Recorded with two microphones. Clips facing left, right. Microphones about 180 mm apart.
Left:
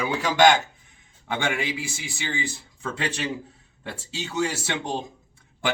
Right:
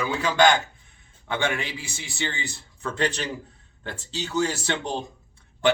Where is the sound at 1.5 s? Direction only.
10° left (ahead or behind).